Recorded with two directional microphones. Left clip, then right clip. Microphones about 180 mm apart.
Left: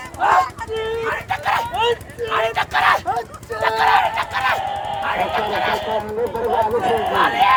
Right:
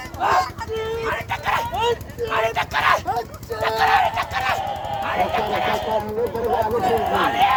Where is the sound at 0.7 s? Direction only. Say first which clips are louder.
Left 2 dB; 5° right (ahead or behind).